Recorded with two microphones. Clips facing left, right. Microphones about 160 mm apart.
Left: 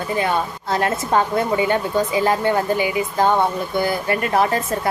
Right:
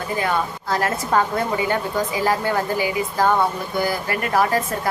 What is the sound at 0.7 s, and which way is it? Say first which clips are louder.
A woman's voice: left 2 dB; 25° left (ahead or behind).